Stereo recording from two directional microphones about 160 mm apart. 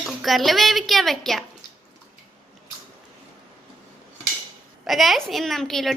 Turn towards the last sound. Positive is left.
turn(degrees=0)  # may be behind; listen again after turning